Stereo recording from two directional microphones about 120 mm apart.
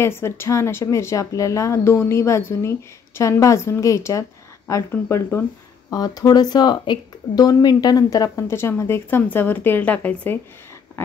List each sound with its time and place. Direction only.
0.0 s speech: 20° left (ahead or behind)
5.9 s speech: 30° left (ahead or behind); by 10.4 s 15° left (ahead or behind)